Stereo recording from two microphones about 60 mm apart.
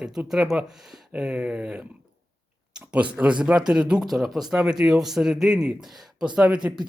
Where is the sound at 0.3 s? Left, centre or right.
Centre.